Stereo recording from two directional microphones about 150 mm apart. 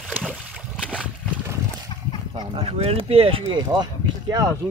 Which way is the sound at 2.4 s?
40° right (ahead or behind).